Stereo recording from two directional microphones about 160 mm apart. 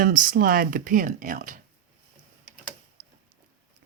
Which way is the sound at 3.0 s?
60° right (ahead or behind).